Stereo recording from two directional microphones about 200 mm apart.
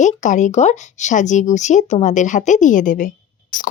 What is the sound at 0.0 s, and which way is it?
Speech, 35° left (ahead or behind).